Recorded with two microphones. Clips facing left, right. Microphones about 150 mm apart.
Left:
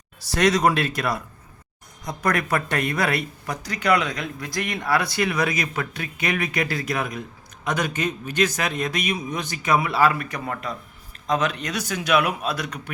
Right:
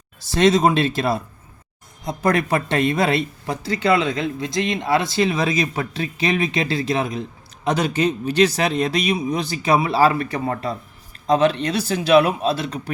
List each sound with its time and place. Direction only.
0.2 s speech: 25° right (ahead or behind)